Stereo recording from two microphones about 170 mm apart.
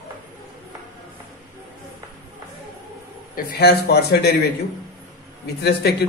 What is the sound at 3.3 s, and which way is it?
A man's voice, 70° left (ahead or behind).